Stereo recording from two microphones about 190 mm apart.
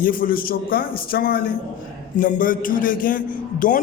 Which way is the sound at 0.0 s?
50° left (ahead or behind).